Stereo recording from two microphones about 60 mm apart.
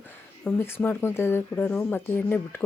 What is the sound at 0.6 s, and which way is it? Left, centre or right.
Speech, left.